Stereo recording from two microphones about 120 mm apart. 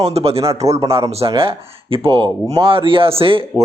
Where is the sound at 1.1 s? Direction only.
55° right (ahead or behind).